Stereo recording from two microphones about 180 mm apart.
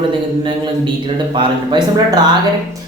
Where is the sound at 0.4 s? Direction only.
25° right (ahead or behind).